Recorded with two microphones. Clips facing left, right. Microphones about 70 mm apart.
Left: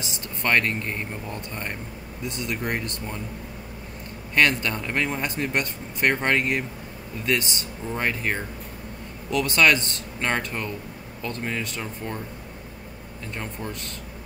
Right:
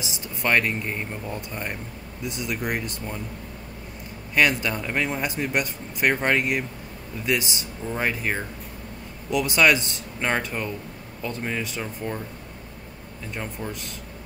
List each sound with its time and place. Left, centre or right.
0.0 s a man's voice: centre
4.4 s a man's voice: centre
13.4 s a man's voice: centre